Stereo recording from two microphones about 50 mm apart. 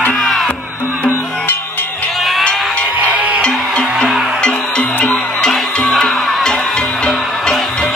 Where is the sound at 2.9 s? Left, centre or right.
Right.